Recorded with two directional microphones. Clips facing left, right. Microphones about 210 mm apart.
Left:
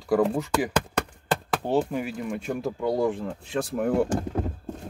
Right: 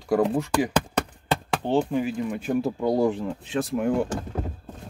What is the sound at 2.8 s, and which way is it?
Speech, 25° right (ahead or behind).